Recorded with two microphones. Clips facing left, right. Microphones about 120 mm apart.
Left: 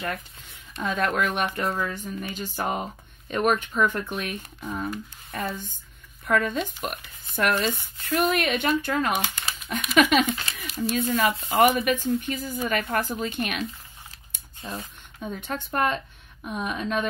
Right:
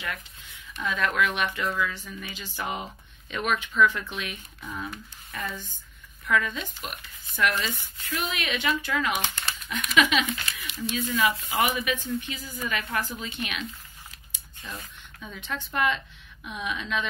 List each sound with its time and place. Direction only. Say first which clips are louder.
0.0 s speech: left 4 dB; 45° left (ahead or behind)
9.2 s crumpling: left 1 dB; 5° left (ahead or behind)
9.7 s speech: left 4 dB; 45° left (ahead or behind)
14.6 s speech: left 5 dB; 35° left (ahead or behind)
15.2 s speech: left 4 dB; 50° left (ahead or behind)